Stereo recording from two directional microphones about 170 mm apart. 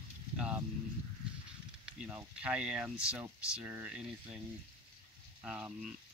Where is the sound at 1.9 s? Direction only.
5° right (ahead or behind).